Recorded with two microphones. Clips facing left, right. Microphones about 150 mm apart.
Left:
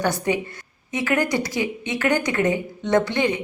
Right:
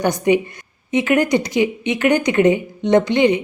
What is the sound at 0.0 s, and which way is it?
A woman's voice, 20° right (ahead or behind).